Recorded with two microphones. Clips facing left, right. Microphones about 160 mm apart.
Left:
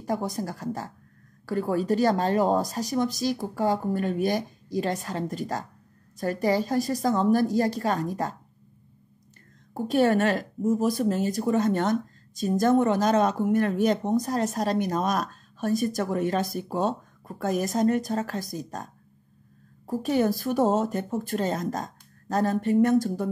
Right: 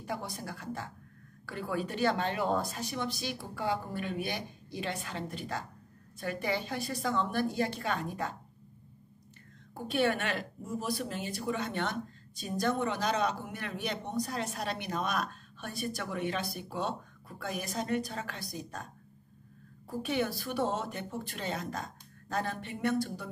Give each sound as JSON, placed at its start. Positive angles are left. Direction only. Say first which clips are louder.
{"t": 0.0, "sound": "a woman's voice", "louder": "left 10 dB", "side_deg": 40}
{"t": 9.8, "sound": "speech", "louder": "left 8 dB", "side_deg": 40}
{"t": 19.9, "sound": "speech", "louder": "left 8 dB", "side_deg": 40}